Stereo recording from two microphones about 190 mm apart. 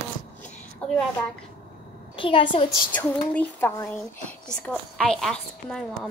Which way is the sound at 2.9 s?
10° left (ahead or behind).